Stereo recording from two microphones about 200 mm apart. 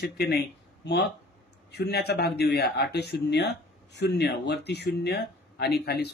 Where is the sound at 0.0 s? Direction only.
55° left (ahead or behind).